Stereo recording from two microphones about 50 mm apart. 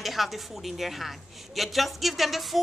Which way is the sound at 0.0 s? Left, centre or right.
Centre.